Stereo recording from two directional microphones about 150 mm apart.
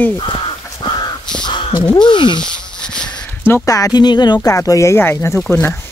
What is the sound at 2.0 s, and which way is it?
Speech, 30° left (ahead or behind).